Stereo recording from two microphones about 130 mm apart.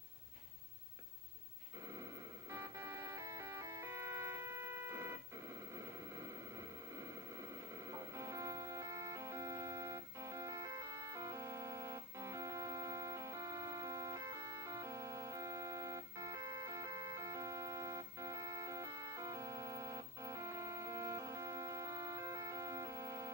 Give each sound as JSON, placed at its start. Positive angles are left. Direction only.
{"t": 2.5, "sound": "music", "side_deg": -20}
{"t": 7.8, "sound": "music", "side_deg": -20}